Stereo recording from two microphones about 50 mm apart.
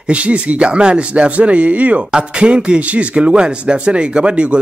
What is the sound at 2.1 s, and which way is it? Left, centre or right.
Speech, centre.